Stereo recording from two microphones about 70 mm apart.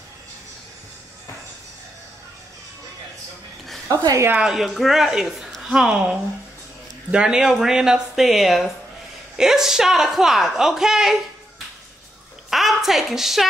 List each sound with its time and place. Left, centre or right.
3.9 s a woman's voice: right
4.4 s speech: centre
12.4 s a sound: centre